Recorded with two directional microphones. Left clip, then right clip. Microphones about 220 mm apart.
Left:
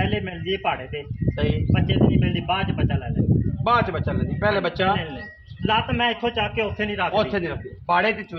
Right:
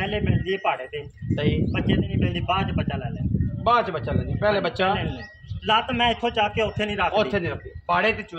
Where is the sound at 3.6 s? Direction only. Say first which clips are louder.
Even; centre (ahead or behind).